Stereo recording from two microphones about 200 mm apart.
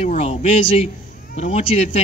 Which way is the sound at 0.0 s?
30° left (ahead or behind).